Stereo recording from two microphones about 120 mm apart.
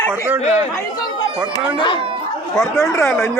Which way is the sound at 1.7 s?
40° left (ahead or behind).